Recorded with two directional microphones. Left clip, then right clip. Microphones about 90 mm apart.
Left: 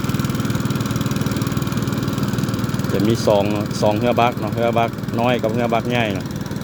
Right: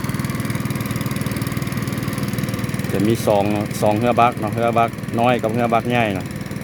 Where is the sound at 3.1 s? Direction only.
25° right (ahead or behind).